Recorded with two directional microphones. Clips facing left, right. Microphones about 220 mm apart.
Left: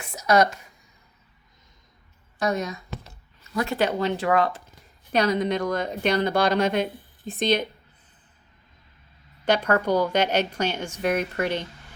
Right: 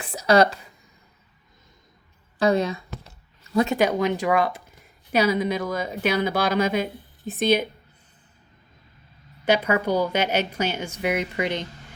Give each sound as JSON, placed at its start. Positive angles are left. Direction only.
{"t": 0.0, "sound": "a woman's voice", "side_deg": -30}
{"t": 2.4, "sound": "speech", "side_deg": -30}
{"t": 3.8, "sound": "a woman's voice", "side_deg": -10}
{"t": 9.4, "sound": "a woman's voice", "side_deg": -5}